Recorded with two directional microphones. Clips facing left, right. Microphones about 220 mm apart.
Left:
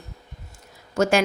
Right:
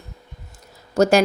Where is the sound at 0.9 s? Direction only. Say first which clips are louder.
Right 4 dB; 35° right (ahead or behind).